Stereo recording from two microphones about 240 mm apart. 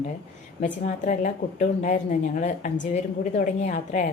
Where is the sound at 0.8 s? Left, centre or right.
Left.